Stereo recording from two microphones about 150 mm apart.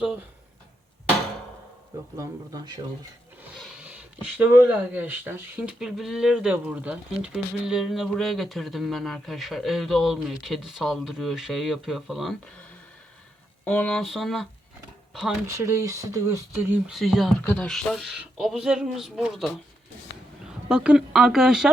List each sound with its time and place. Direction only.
2.1 s speech: 25° right (ahead or behind)
3.4 s speech: 5° right (ahead or behind)
13.7 s speech: 5° left (ahead or behind)
15.4 s speech: 20° right (ahead or behind)
16.9 s speech: centre (ahead or behind)
17.4 s speech: 10° left (ahead or behind)
20.7 s speech: 5° right (ahead or behind)